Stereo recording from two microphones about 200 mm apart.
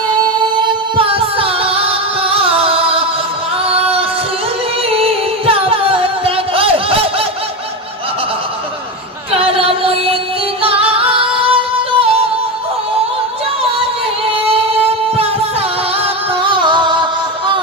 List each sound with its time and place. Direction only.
0.9 s music: 30° right (ahead or behind)
3.7 s female singing: 30° right (ahead or behind)
4.9 s music: 30° right (ahead or behind)
9.4 s music: 30° right (ahead or behind)
10.6 s singing: 30° right (ahead or behind)
14.4 s a sound: 30° right (ahead or behind)
16.5 s music: 25° right (ahead or behind)